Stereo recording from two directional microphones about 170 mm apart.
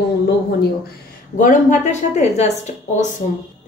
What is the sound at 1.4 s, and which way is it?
A woman's voice, 50° left (ahead or behind).